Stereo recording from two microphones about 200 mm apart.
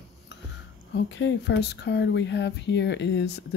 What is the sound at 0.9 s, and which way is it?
Speech, 65° left (ahead or behind).